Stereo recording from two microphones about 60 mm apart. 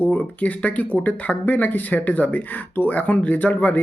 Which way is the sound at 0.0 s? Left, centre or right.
Left.